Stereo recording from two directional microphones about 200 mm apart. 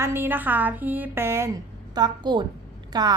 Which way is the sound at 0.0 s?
10° right (ahead or behind).